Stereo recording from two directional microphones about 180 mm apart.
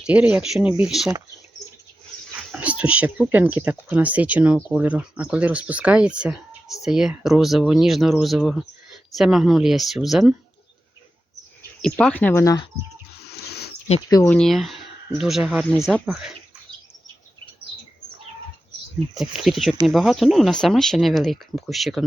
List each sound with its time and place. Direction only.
0.0 s speech: 5° right (ahead or behind)
2.5 s speech: 5° right (ahead or behind)
11.8 s speech: 5° left (ahead or behind)
13.2 s a sound: 65° left (ahead or behind)
14.3 s speech: 5° left (ahead or behind)
19.2 s speech: centre (ahead or behind)